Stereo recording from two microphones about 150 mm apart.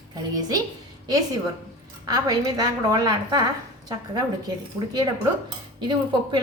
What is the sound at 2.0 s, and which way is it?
A woman's voice, 25° right (ahead or behind).